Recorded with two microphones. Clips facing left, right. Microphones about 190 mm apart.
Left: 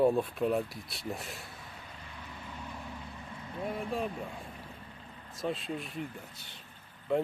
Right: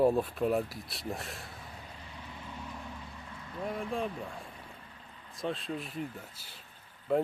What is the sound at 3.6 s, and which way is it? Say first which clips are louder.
Speech: even; centre (ahead or behind).